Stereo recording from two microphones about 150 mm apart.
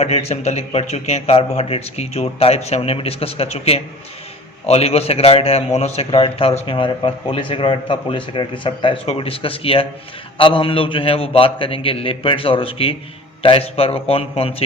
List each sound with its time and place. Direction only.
0.0 s a man's voice: 45° left (ahead or behind)